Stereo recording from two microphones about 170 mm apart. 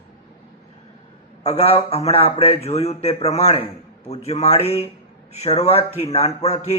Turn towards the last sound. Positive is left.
turn(degrees=40)  # may be behind; listen again after turning